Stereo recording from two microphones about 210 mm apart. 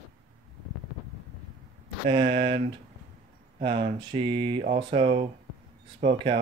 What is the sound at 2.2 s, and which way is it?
Speech, 45° right (ahead or behind).